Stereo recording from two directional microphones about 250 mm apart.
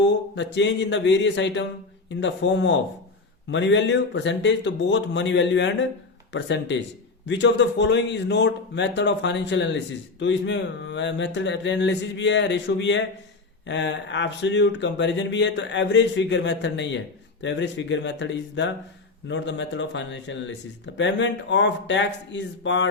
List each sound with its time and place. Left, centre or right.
0.0 s speech: left